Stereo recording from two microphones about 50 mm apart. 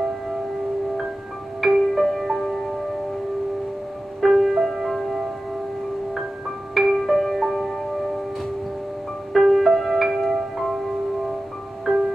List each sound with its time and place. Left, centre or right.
1.6 s music: centre
4.2 s music: centre
6.7 s music: centre
9.3 s music: centre
11.8 s music: centre